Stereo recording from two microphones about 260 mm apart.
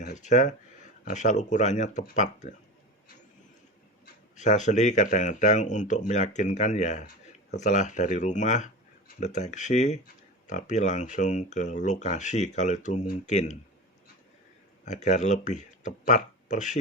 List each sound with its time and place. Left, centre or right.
0.0 s speech: left
4.0 s speech: left
14.8 s speech: left